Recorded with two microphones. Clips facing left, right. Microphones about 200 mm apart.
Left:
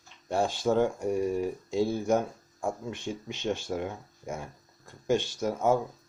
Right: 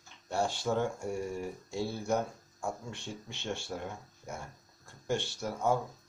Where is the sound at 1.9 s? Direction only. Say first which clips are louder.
Left 3 dB; 90° left.